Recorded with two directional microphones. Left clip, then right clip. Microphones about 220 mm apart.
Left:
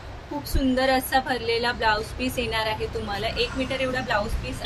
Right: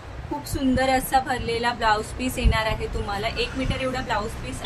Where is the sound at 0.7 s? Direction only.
20° right (ahead or behind).